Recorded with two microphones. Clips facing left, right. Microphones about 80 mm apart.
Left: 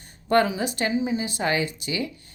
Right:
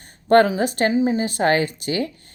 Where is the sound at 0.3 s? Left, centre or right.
Right.